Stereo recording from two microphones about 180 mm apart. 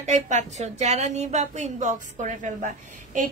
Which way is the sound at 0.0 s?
40° right (ahead or behind).